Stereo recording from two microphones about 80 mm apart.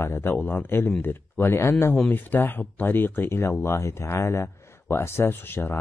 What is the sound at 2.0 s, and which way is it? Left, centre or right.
Speech, left.